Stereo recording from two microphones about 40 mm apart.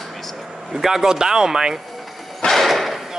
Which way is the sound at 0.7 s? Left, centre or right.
Centre.